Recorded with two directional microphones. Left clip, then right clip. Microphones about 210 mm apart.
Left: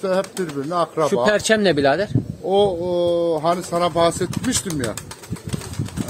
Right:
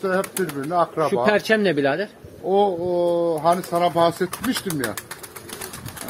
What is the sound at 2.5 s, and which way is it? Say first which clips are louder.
Speech: left 1 dB; 60° left (ahead or behind).